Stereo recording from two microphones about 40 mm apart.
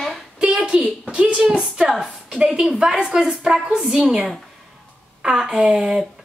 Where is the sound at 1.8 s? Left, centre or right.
Centre.